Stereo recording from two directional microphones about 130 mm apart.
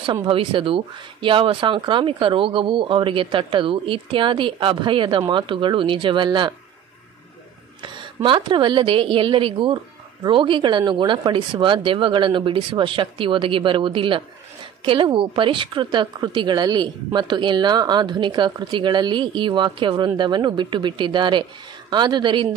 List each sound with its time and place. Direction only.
0.0 s a woman's voice: 40° right (ahead or behind)
7.8 s a woman's voice: 40° right (ahead or behind)